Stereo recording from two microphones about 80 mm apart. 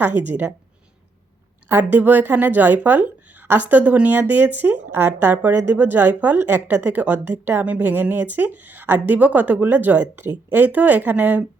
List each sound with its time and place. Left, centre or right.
0.0 s a woman's voice: right
1.8 s a woman's voice: right